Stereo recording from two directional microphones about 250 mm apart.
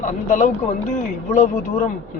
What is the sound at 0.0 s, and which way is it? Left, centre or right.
A man's voice, left.